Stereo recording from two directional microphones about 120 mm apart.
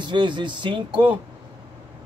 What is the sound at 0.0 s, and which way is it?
Speech, 40° right (ahead or behind).